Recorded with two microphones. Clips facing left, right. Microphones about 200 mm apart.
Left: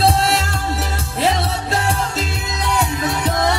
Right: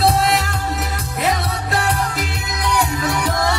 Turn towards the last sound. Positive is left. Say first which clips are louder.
# left 1 dB
turn(degrees=20)  # may be behind; listen again after turning